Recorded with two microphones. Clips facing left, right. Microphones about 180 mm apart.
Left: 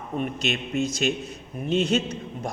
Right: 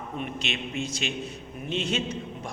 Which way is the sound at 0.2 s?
40° left (ahead or behind).